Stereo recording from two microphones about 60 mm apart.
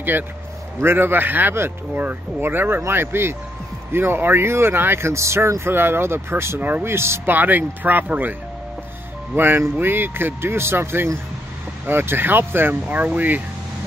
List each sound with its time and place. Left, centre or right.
0.7 s speech: right
5.6 s speech: right
6.6 s speech: right
7.3 s speech: right
12.8 s speech: right